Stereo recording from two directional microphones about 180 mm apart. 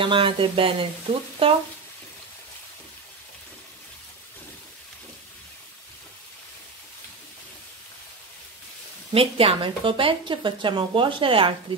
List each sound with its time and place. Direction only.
0.0 s speech: 30° right (ahead or behind)
9.1 s speech: 30° right (ahead or behind)